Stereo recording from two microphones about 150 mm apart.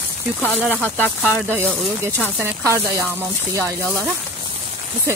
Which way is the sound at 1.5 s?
15° right (ahead or behind).